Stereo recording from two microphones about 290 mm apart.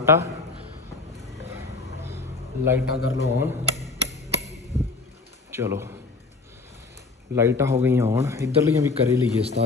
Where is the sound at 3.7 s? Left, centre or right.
Left.